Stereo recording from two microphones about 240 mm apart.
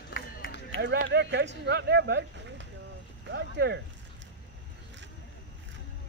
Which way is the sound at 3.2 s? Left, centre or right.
Right.